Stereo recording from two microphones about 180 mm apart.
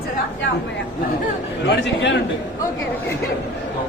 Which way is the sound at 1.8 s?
85° left.